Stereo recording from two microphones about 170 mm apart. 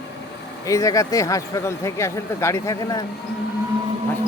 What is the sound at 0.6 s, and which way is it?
Speech, 20° left (ahead or behind).